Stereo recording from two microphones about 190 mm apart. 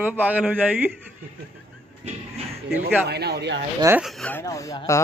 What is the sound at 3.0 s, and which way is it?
Speech, 60° right (ahead or behind).